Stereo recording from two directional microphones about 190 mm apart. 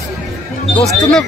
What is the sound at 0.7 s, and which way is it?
Speech, 5° left (ahead or behind).